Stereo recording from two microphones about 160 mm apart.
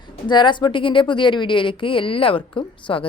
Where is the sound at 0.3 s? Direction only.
30° left (ahead or behind).